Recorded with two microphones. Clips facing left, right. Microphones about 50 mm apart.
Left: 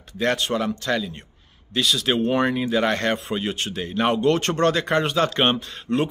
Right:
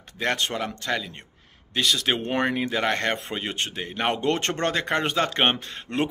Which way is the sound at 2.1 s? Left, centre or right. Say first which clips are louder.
Left 4 dB; right.